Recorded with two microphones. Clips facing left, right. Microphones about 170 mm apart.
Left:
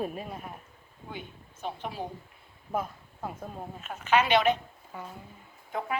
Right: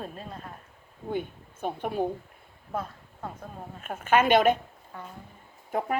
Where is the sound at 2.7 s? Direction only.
10° left (ahead or behind).